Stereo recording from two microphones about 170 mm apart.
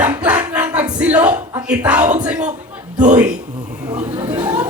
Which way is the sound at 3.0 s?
45° right (ahead or behind).